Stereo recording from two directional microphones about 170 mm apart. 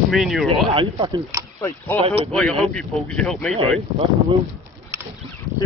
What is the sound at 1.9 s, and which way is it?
Speech, 30° right (ahead or behind).